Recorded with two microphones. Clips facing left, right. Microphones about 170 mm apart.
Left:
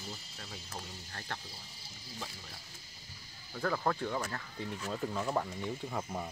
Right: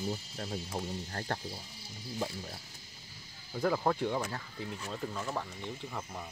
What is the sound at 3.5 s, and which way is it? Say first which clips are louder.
Speech: right 3 dB; 15° right (ahead or behind).